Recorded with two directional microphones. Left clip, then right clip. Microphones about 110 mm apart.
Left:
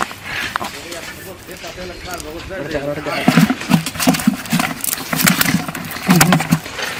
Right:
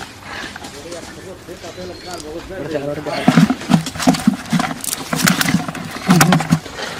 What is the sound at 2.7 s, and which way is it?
Speech, 35° left (ahead or behind).